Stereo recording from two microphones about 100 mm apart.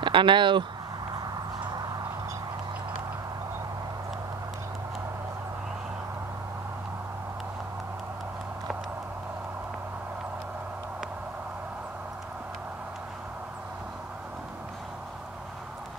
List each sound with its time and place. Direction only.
0.0 s speech: 55° right (ahead or behind)